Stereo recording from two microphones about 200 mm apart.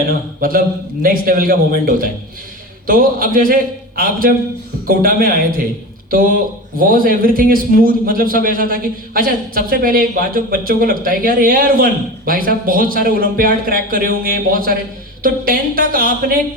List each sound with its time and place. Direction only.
0.1 s a man's voice: 45° right (ahead or behind)